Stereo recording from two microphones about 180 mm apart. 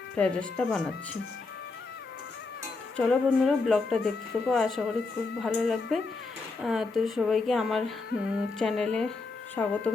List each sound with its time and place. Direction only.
0.2 s speech: 5° left (ahead or behind)
3.0 s speech: 5° left (ahead or behind)